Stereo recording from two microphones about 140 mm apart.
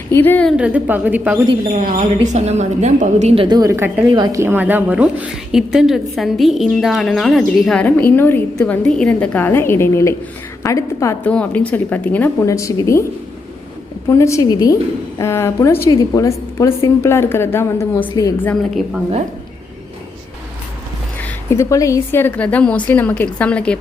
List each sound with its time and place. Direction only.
0.1 s a woman's voice: 15° left (ahead or behind)
0.4 s a woman's voice: 5° right (ahead or behind)
1.6 s a woman's voice: 85° right
2.3 s a woman's voice: 55° right (ahead or behind)
3.3 s a woman's voice: 35° right (ahead or behind)
3.8 s a woman's voice: 15° right (ahead or behind)
4.1 s a woman's voice: 25° right (ahead or behind); by 11.2 s 20° left (ahead or behind)
11.2 s a woman's voice: 10° left (ahead or behind)
14.1 s a woman's voice: 20° left (ahead or behind)
18.7 s a woman's voice: centre (ahead or behind)
21.2 s a woman's voice: 20° left (ahead or behind)